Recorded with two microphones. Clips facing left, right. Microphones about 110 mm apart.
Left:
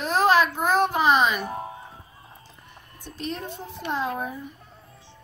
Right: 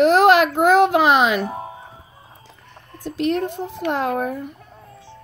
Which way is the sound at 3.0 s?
80° right.